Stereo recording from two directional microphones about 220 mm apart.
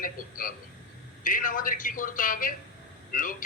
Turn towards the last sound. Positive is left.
turn(degrees=40)  # may be behind; listen again after turning